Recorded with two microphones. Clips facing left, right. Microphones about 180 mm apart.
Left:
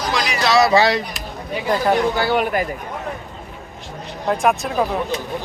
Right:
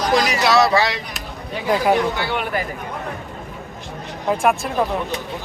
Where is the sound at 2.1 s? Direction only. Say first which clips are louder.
Left 5 dB; 40° left (ahead or behind).